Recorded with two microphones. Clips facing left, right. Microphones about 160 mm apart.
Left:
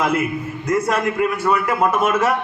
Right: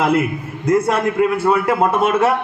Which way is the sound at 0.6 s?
30° right (ahead or behind).